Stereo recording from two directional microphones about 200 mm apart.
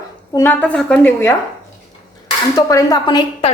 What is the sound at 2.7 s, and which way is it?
Speech, 15° left (ahead or behind).